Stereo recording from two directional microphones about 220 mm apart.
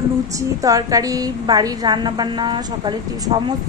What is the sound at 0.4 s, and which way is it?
A woman's voice, 15° right (ahead or behind).